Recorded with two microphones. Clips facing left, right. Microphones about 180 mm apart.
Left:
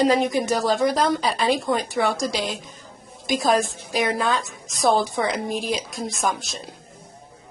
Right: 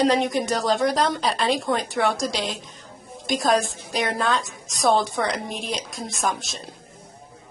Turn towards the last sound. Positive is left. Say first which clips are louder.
# left 1 dB
turn(degrees=0)  # may be behind; listen again after turning